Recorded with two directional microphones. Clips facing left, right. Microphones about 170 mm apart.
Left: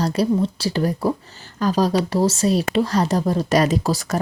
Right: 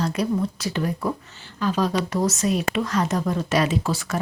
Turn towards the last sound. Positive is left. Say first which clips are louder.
# left 4 dB
turn(degrees=40)  # may be behind; listen again after turning